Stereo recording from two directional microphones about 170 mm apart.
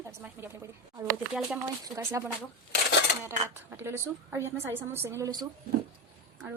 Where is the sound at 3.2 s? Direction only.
15° right (ahead or behind).